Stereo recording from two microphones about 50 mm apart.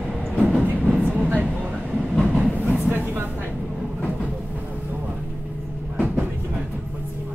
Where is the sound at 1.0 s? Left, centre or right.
Right.